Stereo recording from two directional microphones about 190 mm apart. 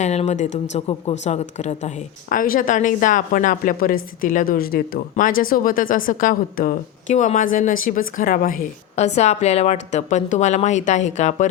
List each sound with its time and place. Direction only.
0.0 s a woman's voice: 35° left (ahead or behind)